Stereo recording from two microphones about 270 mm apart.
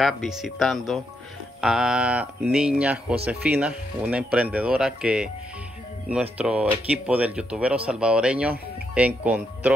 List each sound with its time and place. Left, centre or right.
0.0 s speech: centre
6.3 s speech: centre